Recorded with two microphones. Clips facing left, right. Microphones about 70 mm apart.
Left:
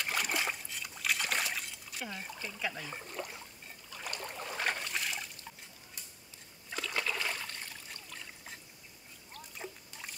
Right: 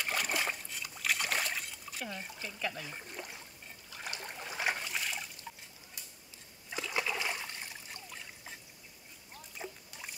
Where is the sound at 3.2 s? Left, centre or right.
Left.